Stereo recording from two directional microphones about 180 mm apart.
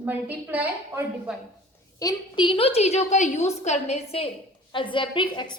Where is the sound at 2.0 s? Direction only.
25° left (ahead or behind).